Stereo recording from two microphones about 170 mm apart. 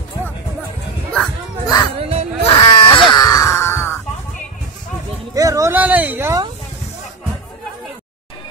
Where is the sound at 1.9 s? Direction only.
35° right (ahead or behind).